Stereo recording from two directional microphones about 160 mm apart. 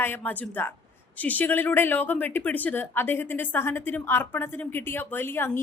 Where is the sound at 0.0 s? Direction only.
10° left (ahead or behind).